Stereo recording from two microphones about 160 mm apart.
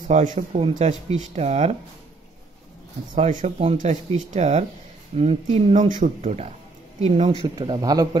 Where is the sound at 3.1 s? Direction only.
50° right (ahead or behind).